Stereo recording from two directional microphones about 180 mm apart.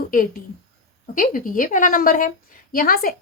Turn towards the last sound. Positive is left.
turn(degrees=55)  # may be behind; listen again after turning